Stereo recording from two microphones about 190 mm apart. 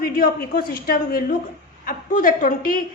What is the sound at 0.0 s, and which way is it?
A woman's voice, 50° left (ahead or behind).